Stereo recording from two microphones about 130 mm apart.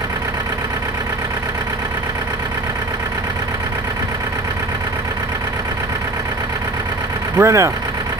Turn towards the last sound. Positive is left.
turn(degrees=-20)  # may be behind; listen again after turning